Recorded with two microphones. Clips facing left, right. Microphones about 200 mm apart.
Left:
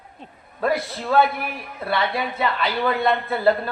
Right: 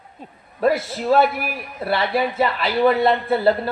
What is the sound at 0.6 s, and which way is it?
Speech, 25° right (ahead or behind).